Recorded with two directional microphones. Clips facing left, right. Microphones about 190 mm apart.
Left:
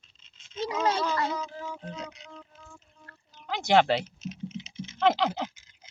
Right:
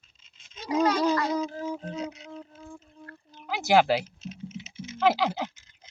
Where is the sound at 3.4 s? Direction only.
5° right (ahead or behind).